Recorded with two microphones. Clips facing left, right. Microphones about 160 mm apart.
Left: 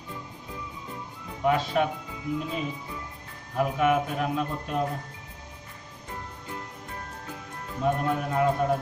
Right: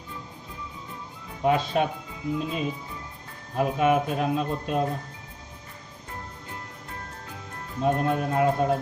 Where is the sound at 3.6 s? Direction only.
25° right (ahead or behind).